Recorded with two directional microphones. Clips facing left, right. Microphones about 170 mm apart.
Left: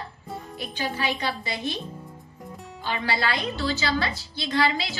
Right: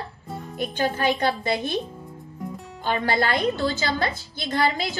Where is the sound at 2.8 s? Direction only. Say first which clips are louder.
Right 4 dB; 50° right (ahead or behind).